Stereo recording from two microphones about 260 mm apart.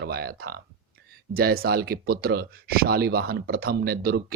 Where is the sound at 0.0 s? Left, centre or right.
Right.